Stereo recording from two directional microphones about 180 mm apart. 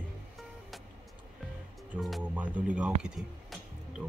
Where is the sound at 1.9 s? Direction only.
Centre (ahead or behind).